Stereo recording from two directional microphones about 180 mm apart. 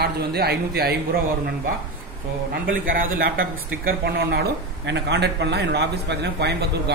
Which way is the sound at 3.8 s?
65° right (ahead or behind).